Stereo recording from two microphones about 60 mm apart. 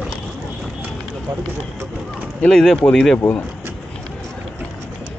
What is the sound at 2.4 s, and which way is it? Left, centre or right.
Speech, centre.